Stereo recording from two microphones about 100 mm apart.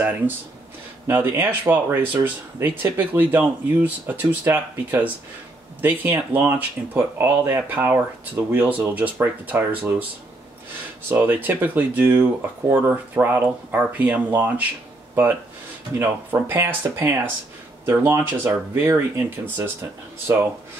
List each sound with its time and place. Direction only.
1.0 s speech: 25° right (ahead or behind)
11.1 s speech: 20° right (ahead or behind)
16.0 s speech: 20° right (ahead or behind)